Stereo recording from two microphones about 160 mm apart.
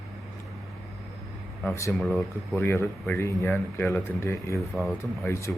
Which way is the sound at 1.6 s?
15° left (ahead or behind).